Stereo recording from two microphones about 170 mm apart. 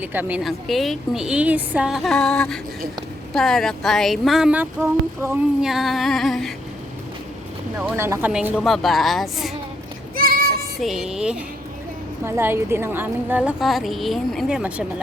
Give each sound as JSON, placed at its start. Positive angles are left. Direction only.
{"t": 0.0, "sound": "a woman's voice", "side_deg": -10}
{"t": 5.6, "sound": "a woman's voice", "side_deg": 0}
{"t": 7.8, "sound": "a woman's voice", "side_deg": -10}
{"t": 10.2, "sound": "child singing", "side_deg": -60}
{"t": 10.8, "sound": "a woman's voice", "side_deg": 0}